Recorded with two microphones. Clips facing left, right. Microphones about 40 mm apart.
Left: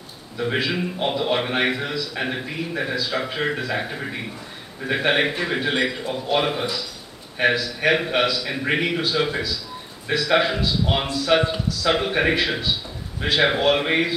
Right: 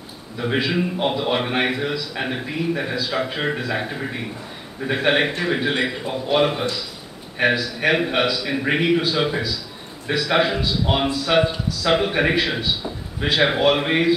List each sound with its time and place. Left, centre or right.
0.4 s a man's voice: centre
4.8 s a man's voice: centre